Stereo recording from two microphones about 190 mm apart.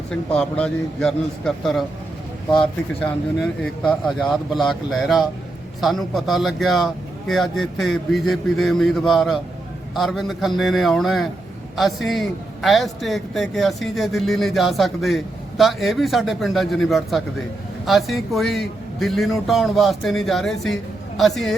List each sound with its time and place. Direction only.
0.3 s speech: 5° left (ahead or behind)
3.0 s speech: 5° left (ahead or behind)